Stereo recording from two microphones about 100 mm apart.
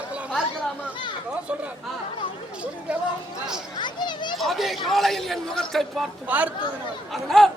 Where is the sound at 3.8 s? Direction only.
50° left (ahead or behind).